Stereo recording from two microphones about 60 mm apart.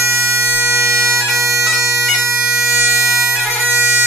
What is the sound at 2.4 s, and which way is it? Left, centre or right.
Bagpipes, centre.